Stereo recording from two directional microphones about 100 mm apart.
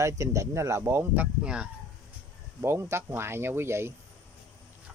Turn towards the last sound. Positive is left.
turn(degrees=-25)  # may be behind; listen again after turning